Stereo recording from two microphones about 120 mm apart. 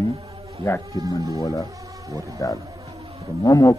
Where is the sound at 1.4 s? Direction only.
25° left (ahead or behind).